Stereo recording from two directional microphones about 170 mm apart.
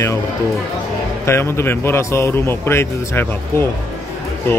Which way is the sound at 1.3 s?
15° left (ahead or behind).